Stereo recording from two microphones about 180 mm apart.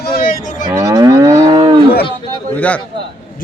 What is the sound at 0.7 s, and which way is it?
Moo, 20° right (ahead or behind).